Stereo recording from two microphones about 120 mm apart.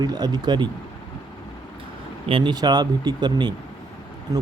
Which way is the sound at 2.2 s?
45° right (ahead or behind).